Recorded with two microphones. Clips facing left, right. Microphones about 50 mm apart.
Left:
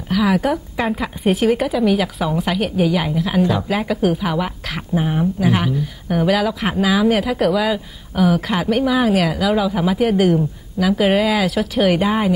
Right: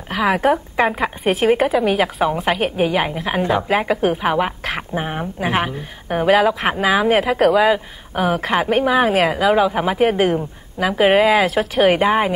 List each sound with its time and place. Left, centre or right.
0.1 s a woman's voice: right
0.8 s a woman's voice: centre
1.4 s a woman's voice: right
1.8 s a woman's voice: centre
2.2 s a woman's voice: right